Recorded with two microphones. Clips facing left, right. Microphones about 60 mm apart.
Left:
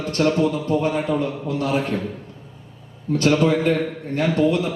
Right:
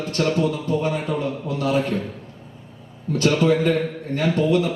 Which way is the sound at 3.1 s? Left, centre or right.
Left.